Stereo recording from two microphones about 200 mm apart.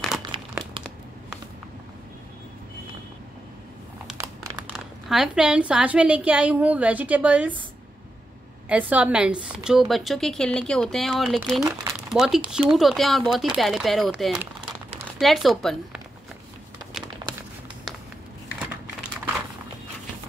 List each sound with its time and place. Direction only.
0.3 s crumpling: 25° right (ahead or behind)
4.7 s a woman's voice: centre (ahead or behind)
8.6 s a woman's voice: 5° right (ahead or behind)
11.6 s speech: 15° right (ahead or behind)
12.1 s a woman's voice: centre (ahead or behind)
17.2 s crumpling: 20° right (ahead or behind)